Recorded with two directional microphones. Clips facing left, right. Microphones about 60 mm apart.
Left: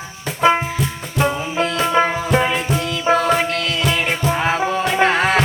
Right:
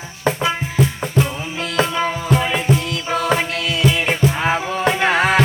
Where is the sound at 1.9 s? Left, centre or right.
Left.